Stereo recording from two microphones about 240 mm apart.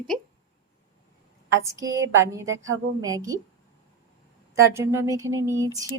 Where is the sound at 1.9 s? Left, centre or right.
Centre.